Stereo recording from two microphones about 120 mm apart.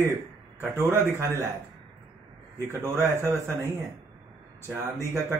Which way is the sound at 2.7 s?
20° right (ahead or behind).